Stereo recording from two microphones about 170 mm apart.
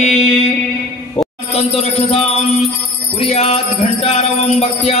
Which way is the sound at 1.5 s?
35° left (ahead or behind).